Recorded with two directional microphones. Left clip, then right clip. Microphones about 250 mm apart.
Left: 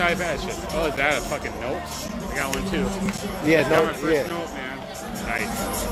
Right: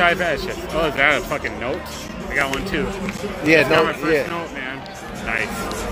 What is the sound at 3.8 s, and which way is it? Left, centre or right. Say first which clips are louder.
Speech: right 3 dB; right.